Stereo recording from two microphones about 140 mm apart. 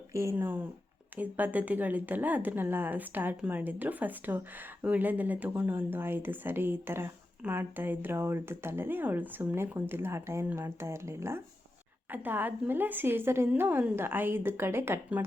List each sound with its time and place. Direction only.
0.1 s speech: 20° right (ahead or behind)